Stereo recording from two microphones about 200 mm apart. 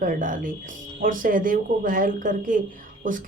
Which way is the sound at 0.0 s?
40° right (ahead or behind).